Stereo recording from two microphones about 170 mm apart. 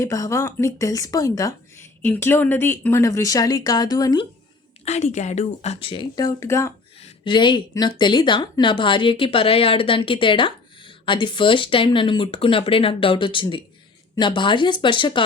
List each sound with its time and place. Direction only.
0.0 s speech: 20° left (ahead or behind)
4.9 s speech: 40° left (ahead or behind); by 6.7 s 15° left (ahead or behind)
7.0 s speech: 30° left (ahead or behind)